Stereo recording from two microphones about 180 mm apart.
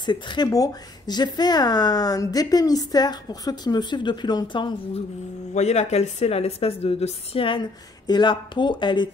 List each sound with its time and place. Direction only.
0.0 s speech: 25° left (ahead or behind)
5.5 s speech: 40° left (ahead or behind)